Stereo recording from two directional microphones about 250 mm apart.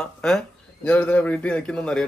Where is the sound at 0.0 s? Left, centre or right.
Centre.